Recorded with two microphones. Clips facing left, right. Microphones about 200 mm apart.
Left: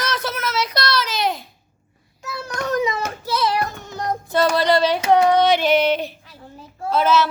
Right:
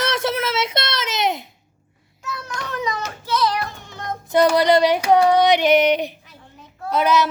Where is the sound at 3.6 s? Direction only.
45° left (ahead or behind).